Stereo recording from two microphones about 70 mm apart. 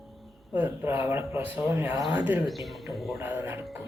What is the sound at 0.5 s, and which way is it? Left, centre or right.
Speech, right.